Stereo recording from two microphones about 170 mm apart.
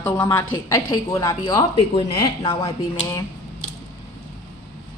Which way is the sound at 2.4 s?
35° left (ahead or behind).